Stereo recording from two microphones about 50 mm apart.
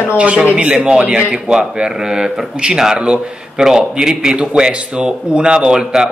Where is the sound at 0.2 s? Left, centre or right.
Right.